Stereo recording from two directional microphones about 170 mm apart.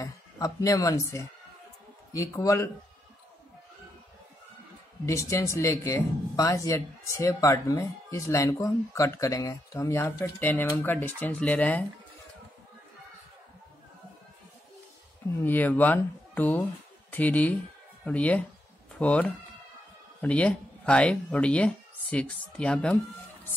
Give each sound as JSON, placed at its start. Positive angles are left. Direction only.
{"t": 0.0, "sound": "speech", "side_deg": 20}
{"t": 5.0, "sound": "speech", "side_deg": 15}
{"t": 15.4, "sound": "speech", "side_deg": 10}